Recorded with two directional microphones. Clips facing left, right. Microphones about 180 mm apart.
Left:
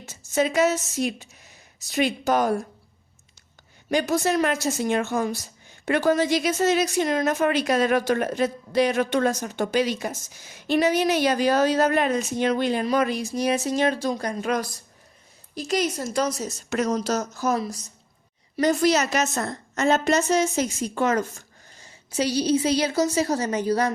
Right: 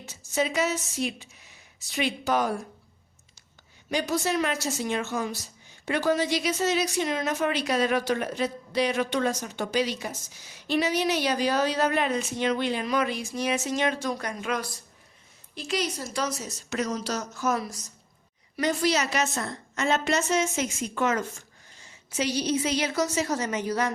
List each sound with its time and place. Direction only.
0.0 s a woman's voice: 50° left (ahead or behind)
3.8 s a woman's voice: 50° left (ahead or behind)
18.6 s a woman's voice: 45° left (ahead or behind)